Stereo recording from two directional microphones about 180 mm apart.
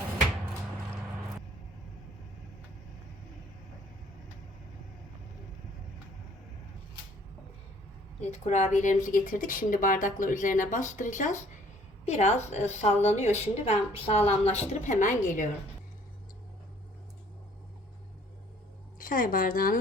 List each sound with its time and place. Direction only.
8.2 s a woman's voice: 40° left (ahead or behind)
18.9 s speech: 50° left (ahead or behind)